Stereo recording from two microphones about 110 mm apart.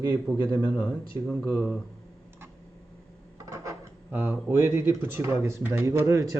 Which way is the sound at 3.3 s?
30° right (ahead or behind).